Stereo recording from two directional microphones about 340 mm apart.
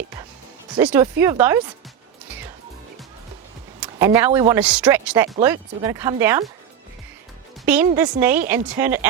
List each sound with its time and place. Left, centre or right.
0.8 s speech: centre
3.8 s speech: centre
7.7 s speech: centre